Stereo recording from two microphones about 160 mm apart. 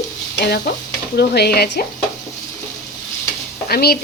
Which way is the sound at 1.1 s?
85° left.